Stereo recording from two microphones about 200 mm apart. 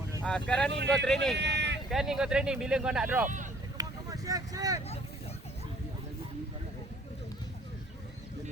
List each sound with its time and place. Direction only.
0.3 s speech: 5° left (ahead or behind)
1.4 s vehicle: 60° right (ahead or behind)
1.9 s speech: centre (ahead or behind)
3.2 s vehicle: 40° right (ahead or behind)
3.8 s vehicle: 15° right (ahead or behind)